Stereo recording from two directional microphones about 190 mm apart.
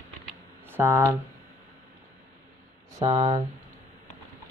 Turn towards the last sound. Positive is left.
turn(degrees=-25)  # may be behind; listen again after turning